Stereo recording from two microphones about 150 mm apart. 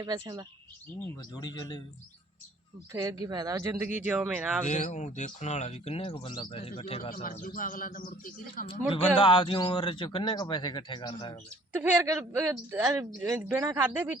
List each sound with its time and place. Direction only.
0.0 s speech: 25° right (ahead or behind)
1.3 s speech: 25° left (ahead or behind)
2.9 s speech: 20° right (ahead or behind)
4.6 s a man's voice: 50° left (ahead or behind)
7.1 s speech: 65° left (ahead or behind)
8.9 s a man's voice: 35° left (ahead or behind)
12.0 s speech: 15° right (ahead or behind)